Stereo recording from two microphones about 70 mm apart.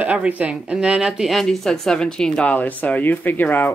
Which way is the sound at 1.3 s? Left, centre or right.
Centre.